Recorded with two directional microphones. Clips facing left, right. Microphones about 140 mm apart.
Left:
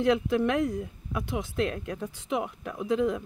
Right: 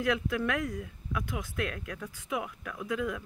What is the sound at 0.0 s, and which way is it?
Speech, 25° left (ahead or behind).